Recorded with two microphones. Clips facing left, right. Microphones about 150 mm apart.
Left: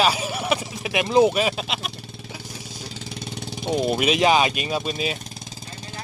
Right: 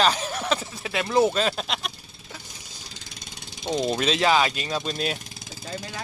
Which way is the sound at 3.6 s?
10° left (ahead or behind).